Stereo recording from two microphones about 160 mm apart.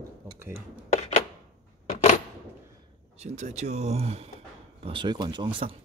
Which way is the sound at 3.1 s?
45° right (ahead or behind).